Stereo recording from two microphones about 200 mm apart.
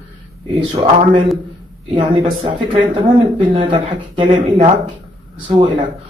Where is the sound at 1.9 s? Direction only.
25° right (ahead or behind).